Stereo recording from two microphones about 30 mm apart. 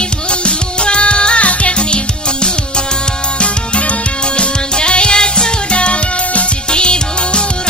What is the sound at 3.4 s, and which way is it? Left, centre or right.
Music, left.